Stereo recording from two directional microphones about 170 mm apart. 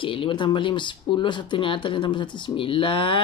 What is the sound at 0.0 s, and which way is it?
Speech, 30° left (ahead or behind).